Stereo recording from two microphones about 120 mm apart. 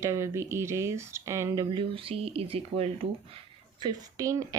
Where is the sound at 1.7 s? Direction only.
45° right (ahead or behind).